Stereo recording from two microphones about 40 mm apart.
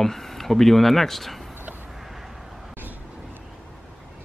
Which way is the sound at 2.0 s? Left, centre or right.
Centre.